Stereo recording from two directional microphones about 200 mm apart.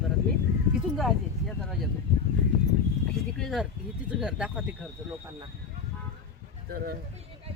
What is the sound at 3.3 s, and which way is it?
Speech, centre (ahead or behind).